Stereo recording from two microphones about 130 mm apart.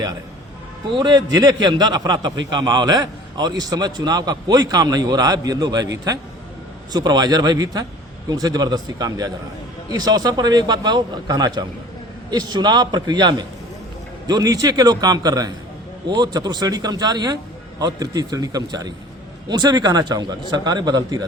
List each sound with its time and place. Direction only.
0.9 s a man's voice: 35° right (ahead or behind)